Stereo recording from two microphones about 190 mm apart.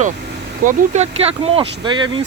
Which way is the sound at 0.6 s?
40° right (ahead or behind).